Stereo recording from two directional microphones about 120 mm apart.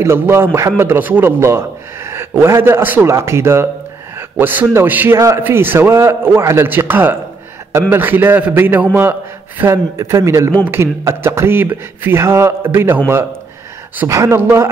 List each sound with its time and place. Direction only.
0.0 s a man's voice: 20° right (ahead or behind)